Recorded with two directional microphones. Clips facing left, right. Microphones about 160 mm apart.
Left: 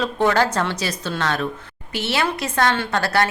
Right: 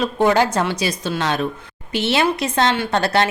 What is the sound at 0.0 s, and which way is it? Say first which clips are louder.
A woman's voice: right 2 dB; 15° right (ahead or behind).